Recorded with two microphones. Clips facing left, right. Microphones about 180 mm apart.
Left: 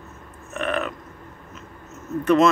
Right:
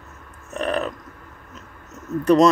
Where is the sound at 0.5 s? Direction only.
35° right (ahead or behind).